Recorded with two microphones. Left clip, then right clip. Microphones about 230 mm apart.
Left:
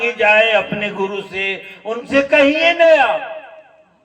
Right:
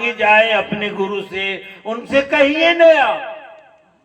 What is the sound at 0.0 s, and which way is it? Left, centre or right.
Speech, left.